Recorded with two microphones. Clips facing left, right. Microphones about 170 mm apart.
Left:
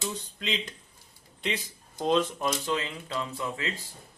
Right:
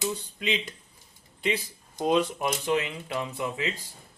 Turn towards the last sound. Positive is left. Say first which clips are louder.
# right 2 dB
turn(degrees=-15)  # may be behind; listen again after turning